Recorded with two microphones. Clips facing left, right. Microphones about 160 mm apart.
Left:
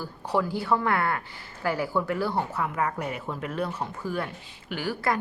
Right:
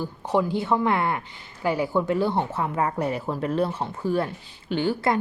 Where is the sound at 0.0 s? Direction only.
20° right (ahead or behind).